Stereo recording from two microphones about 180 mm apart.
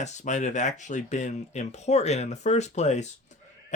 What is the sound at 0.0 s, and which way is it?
Speech, 40° left (ahead or behind).